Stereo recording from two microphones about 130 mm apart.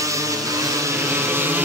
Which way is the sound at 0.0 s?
25° right (ahead or behind).